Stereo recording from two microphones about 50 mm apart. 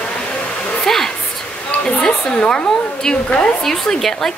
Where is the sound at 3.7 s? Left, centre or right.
Centre.